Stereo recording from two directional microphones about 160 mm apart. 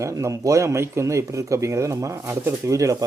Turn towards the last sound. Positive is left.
turn(degrees=-20)  # may be behind; listen again after turning